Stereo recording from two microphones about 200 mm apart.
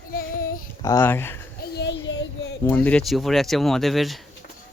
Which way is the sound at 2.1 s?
60° left (ahead or behind).